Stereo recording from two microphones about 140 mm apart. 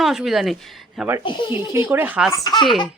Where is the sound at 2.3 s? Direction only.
25° left (ahead or behind).